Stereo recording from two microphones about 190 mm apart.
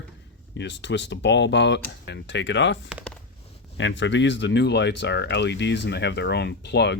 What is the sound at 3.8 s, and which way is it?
Speech, 70° left (ahead or behind).